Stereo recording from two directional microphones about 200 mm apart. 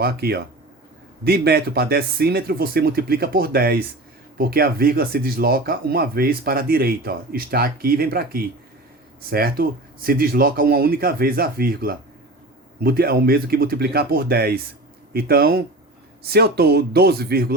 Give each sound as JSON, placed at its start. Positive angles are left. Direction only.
{"t": 0.0, "sound": "speech", "side_deg": -50}